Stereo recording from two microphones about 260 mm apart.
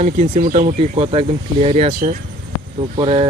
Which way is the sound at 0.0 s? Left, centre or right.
Right.